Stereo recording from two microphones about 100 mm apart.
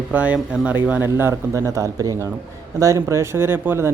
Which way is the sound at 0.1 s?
15° right (ahead or behind).